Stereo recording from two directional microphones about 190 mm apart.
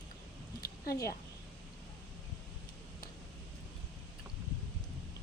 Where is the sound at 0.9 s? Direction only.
15° left (ahead or behind).